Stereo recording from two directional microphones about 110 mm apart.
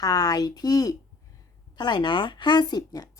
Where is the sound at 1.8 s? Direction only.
45° left (ahead or behind).